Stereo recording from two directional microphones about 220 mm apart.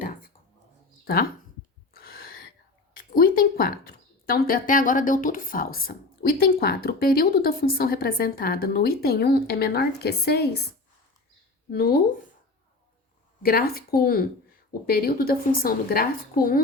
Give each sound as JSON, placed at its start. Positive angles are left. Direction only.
{"t": 1.0, "sound": "speech", "side_deg": 45}
{"t": 1.9, "sound": "a sound", "side_deg": 45}
{"t": 3.1, "sound": "a woman's voice", "side_deg": 40}
{"t": 11.7, "sound": "a woman's voice", "side_deg": 45}
{"t": 13.4, "sound": "a woman's voice", "side_deg": 45}